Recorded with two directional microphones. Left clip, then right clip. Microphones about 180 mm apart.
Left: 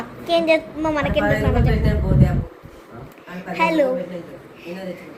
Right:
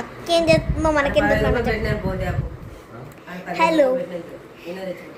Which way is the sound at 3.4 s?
20° right (ahead or behind).